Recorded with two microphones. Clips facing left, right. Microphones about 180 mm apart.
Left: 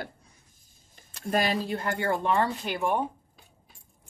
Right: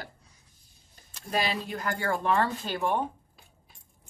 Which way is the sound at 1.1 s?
45° left (ahead or behind).